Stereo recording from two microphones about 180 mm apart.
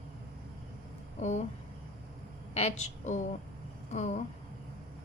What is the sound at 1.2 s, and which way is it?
Speech, 40° left (ahead or behind).